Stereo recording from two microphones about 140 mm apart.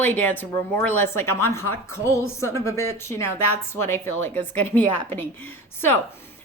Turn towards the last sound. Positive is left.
turn(degrees=15)  # may be behind; listen again after turning